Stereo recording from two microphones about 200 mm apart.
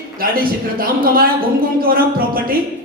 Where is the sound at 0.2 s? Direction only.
45° right (ahead or behind).